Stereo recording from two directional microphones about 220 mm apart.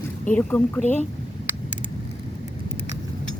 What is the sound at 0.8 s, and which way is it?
Speech, 30° left (ahead or behind).